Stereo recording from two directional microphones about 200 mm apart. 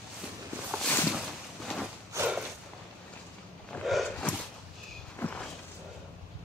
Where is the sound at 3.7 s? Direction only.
Centre (ahead or behind).